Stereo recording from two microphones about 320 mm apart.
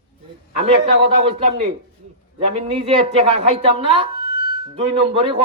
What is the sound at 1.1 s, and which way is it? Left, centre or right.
A man's voice, centre.